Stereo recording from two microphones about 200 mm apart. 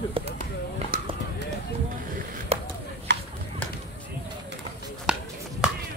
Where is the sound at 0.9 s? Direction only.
45° right (ahead or behind).